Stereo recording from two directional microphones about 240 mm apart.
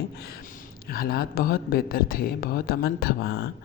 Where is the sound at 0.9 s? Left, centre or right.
Left.